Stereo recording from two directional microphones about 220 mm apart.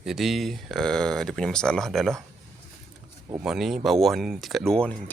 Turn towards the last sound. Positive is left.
turn(degrees=5)  # may be behind; listen again after turning